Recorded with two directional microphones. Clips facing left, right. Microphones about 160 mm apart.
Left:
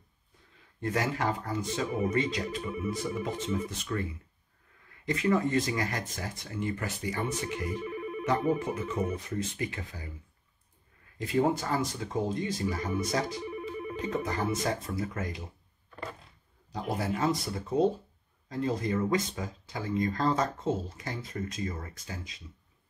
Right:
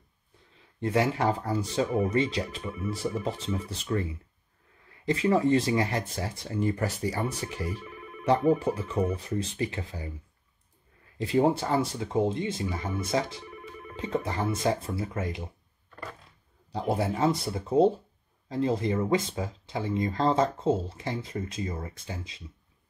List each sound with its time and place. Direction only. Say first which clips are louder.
0.7 s speech: right 5 dB; 25° right (ahead or behind)
11.1 s speech: right 3 dB; 30° right (ahead or behind)
16.7 s speech: right 4 dB; 30° right (ahead or behind)